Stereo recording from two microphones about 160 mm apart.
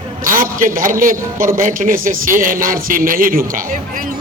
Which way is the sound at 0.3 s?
55° right (ahead or behind).